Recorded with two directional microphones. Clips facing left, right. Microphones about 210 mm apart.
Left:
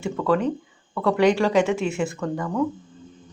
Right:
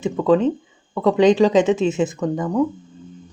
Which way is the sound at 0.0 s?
20° right (ahead or behind).